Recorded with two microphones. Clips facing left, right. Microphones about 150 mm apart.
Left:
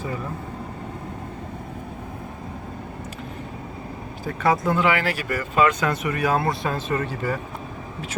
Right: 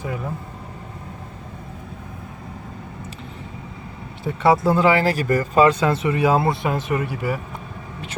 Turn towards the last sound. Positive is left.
turn(degrees=-10)  # may be behind; listen again after turning